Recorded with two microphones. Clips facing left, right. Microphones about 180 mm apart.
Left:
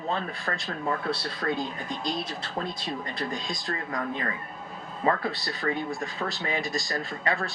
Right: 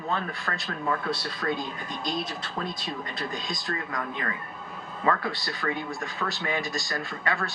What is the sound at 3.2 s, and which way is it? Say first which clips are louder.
Speech: left 1 dB; 30° left (ahead or behind).